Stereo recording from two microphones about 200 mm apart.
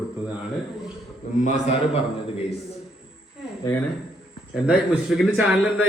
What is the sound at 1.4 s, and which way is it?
Speech, 35° left (ahead or behind).